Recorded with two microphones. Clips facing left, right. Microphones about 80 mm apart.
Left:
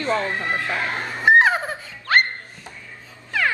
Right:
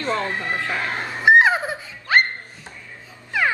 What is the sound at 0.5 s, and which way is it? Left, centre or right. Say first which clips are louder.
Speech: left 1 dB; centre.